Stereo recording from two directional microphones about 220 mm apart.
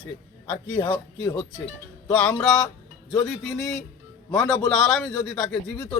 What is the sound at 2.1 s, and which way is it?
A man's voice, 5° left (ahead or behind).